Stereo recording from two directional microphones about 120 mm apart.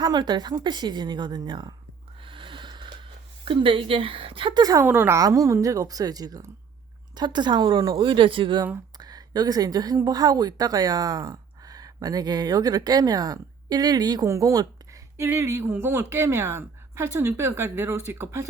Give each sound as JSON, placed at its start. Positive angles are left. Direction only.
{"t": 0.0, "sound": "a woman's voice", "side_deg": -35}
{"t": 2.2, "sound": "a sound", "side_deg": -45}
{"t": 3.4, "sound": "a woman's voice", "side_deg": -45}
{"t": 4.8, "sound": "a woman's voice", "side_deg": -15}
{"t": 9.0, "sound": "a woman's voice", "side_deg": -35}